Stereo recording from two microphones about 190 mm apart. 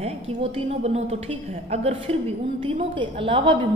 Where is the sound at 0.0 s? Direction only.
35° right (ahead or behind).